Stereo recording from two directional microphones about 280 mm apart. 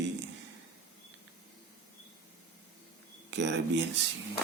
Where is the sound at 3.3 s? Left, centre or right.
Right.